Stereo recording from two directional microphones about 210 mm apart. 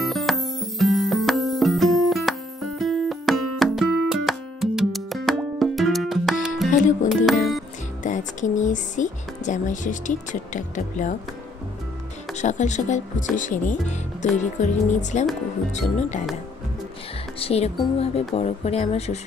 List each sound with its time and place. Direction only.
0.0 s music: centre (ahead or behind)
8.0 s speech: 35° left (ahead or behind)
12.4 s speech: 35° left (ahead or behind)
17.4 s speech: 30° left (ahead or behind)